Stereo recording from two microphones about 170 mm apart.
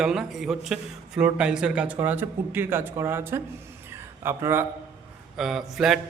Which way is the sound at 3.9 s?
15° right (ahead or behind).